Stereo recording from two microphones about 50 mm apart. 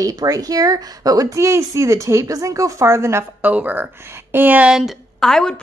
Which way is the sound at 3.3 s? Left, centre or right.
Right.